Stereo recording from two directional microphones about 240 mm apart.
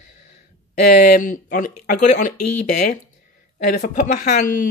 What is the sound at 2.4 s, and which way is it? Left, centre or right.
Speech, left.